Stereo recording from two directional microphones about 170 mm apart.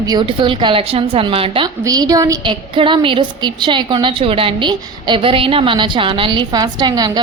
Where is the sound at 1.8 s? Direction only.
20° right (ahead or behind).